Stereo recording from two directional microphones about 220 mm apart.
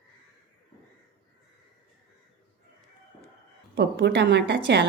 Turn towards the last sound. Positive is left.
turn(degrees=-55)  # may be behind; listen again after turning